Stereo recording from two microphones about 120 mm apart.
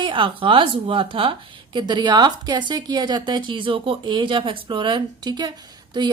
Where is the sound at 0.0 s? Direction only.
45° right (ahead or behind).